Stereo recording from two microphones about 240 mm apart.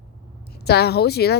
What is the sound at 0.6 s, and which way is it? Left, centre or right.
Speech, left.